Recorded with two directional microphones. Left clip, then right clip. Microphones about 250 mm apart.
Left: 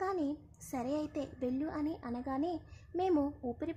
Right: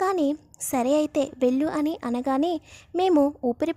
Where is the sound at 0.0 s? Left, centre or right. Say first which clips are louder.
Right 12 dB; right.